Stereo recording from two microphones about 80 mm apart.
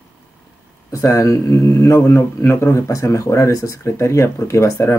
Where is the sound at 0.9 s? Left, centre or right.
Left.